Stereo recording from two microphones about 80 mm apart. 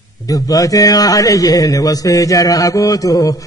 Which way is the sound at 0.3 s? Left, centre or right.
Left.